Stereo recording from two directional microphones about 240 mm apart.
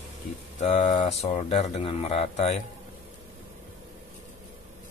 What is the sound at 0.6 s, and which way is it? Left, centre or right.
Speech, left.